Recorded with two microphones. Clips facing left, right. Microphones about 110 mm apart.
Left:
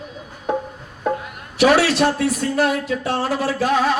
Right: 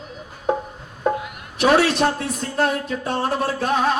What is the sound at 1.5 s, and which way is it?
Speech, 90° left.